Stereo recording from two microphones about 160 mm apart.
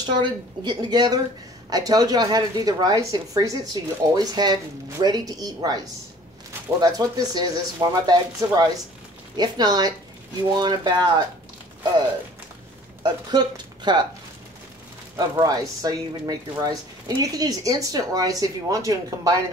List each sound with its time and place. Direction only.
0.0 s speech: 30° right (ahead or behind)
6.8 s speech: 25° right (ahead or behind)
13.0 s speech: 25° right (ahead or behind)
15.1 s speech: 25° right (ahead or behind)